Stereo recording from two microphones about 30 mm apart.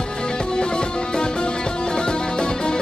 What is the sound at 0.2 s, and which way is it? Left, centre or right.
Music, left.